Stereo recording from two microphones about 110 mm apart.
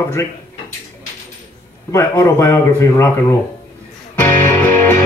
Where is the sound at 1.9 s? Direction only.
25° left (ahead or behind).